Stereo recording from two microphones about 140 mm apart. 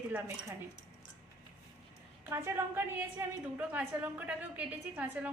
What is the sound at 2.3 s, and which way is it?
A woman's voice, 20° right (ahead or behind).